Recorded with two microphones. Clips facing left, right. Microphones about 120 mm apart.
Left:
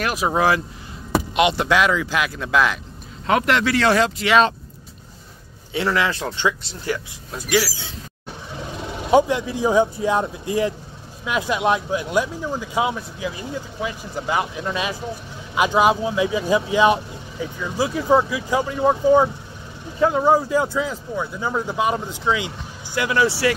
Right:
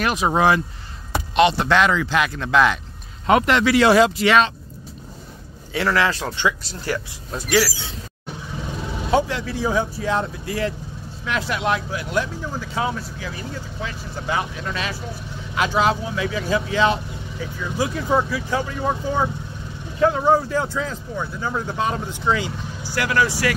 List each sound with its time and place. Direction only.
0.0 s speech: 5° left (ahead or behind)
1.3 s speech: 15° left (ahead or behind); by 4.3 s 10° right (ahead or behind)
5.7 s speech: 25° left (ahead or behind)
9.1 s speech: 15° left (ahead or behind)